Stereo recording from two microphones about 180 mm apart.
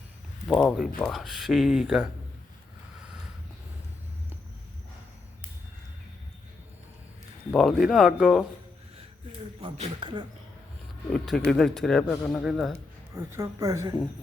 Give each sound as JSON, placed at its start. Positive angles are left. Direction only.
{"t": 0.4, "sound": "speech", "side_deg": 5}
{"t": 7.5, "sound": "speech", "side_deg": 0}
{"t": 9.6, "sound": "speech", "side_deg": -30}
{"t": 11.1, "sound": "speech", "side_deg": 5}
{"t": 13.1, "sound": "speech", "side_deg": -15}